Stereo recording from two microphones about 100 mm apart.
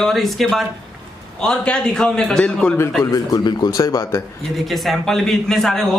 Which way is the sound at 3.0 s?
35° left (ahead or behind).